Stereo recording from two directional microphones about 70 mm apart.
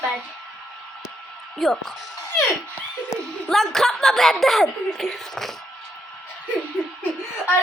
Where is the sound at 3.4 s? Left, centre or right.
Centre.